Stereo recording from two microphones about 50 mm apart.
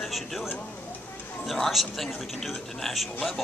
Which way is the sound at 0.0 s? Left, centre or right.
Centre.